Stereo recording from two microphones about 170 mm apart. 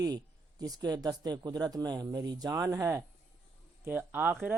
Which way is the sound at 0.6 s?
20° right (ahead or behind).